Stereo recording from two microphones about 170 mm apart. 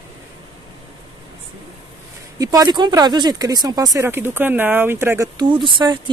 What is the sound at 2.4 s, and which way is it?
Speech, 20° right (ahead or behind).